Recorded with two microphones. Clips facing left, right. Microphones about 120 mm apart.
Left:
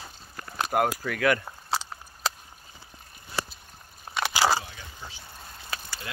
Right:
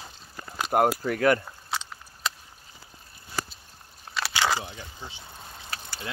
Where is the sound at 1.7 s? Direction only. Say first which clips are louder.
Left 3 dB; 35° left (ahead or behind).